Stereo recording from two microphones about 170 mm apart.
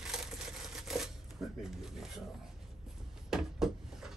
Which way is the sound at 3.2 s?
Centre (ahead or behind).